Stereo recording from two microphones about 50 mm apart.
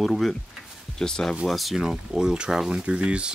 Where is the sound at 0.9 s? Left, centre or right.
Centre.